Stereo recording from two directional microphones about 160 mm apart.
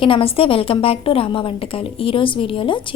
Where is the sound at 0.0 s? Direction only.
35° left (ahead or behind).